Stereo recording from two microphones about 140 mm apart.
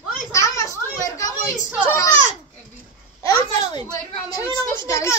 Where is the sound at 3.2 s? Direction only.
30° left (ahead or behind).